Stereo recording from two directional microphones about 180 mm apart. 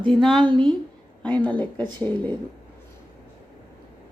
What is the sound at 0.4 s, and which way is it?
Speech, 30° right (ahead or behind).